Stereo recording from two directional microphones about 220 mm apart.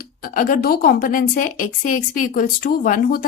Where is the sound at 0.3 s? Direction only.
40° left (ahead or behind).